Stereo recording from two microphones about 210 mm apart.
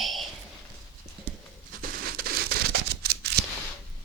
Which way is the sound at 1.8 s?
45° right (ahead or behind).